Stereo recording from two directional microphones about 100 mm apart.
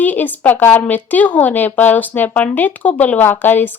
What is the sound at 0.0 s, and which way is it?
A woman's voice, 15° left (ahead or behind).